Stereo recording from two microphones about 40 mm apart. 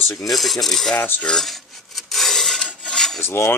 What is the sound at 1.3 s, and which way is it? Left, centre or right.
Filing, centre.